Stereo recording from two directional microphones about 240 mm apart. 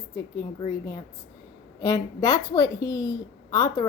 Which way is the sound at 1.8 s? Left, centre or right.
Centre.